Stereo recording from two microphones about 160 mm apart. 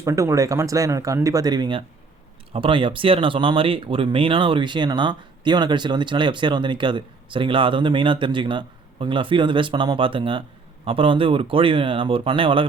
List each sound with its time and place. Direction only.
0.0 s speech: 20° right (ahead or behind)